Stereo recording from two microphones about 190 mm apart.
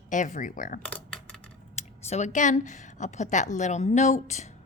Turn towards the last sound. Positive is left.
turn(degrees=40)  # may be behind; listen again after turning